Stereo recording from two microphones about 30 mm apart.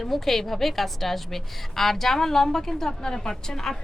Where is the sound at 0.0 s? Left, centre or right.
Centre.